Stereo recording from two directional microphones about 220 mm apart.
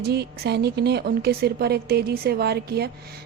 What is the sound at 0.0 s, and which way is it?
A woman's voice, 50° right (ahead or behind).